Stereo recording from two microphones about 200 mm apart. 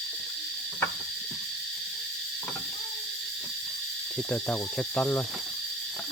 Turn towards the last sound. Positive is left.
turn(degrees=5)  # may be behind; listen again after turning